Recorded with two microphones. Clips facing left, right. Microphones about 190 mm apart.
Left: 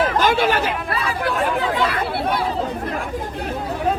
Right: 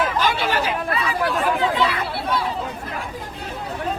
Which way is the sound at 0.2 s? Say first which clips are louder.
Left 4 dB; 50° left (ahead or behind).